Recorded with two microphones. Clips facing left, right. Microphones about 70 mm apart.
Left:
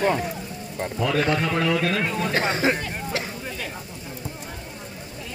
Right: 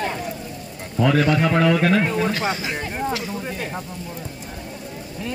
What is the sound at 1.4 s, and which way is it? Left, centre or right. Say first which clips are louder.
Speech: right 5 dB; right.